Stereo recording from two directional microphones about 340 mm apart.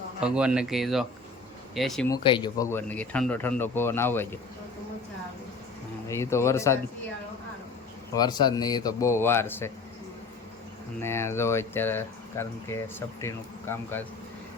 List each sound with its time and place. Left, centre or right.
0.2 s speech: centre
6.1 s speech: centre
8.1 s speech: centre
11.0 s speech: centre